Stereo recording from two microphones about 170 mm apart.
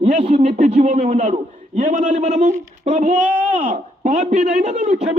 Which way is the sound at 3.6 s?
45° right (ahead or behind).